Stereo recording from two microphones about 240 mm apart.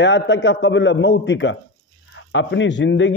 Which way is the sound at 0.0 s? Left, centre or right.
Left.